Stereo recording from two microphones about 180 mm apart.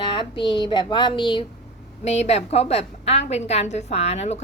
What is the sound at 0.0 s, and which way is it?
A woman's voice, 25° left (ahead or behind).